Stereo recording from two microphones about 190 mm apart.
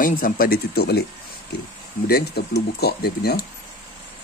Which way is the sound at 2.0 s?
55° left (ahead or behind).